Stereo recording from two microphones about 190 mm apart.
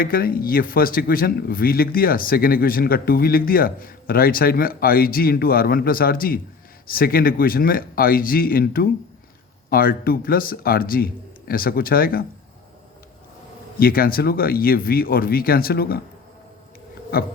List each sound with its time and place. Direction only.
0.0 s a man's voice: 50° left (ahead or behind)
13.7 s a man's voice: 50° left (ahead or behind)